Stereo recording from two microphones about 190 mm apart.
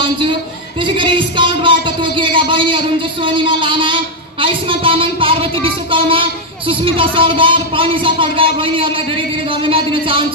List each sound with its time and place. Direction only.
0.0 s speech: 25° right (ahead or behind)